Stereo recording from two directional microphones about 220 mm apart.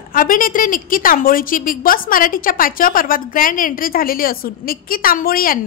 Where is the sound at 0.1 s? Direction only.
40° left (ahead or behind).